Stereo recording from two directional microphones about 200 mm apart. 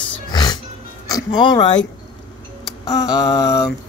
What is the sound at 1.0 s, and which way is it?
Speech, 20° left (ahead or behind).